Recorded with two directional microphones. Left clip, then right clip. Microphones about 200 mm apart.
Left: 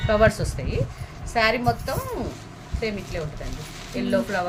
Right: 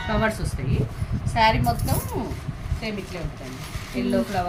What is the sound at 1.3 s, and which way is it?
Speech, 50° left (ahead or behind).